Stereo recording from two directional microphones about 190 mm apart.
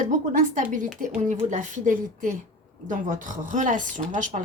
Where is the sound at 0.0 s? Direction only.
45° right (ahead or behind).